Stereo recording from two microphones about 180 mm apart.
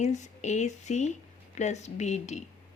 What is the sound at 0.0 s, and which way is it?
Speech, 40° left (ahead or behind).